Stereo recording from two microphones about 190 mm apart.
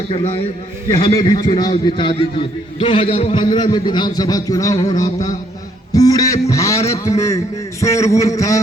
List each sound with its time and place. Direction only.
0.9 s a man's voice: 20° left (ahead or behind)
5.9 s a sound: 20° left (ahead or behind)
6.9 s a man's voice: 15° left (ahead or behind)